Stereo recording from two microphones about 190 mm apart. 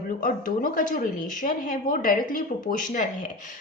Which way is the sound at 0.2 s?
45° left (ahead or behind).